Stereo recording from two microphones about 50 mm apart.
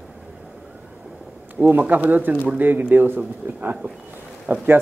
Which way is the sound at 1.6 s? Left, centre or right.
Right.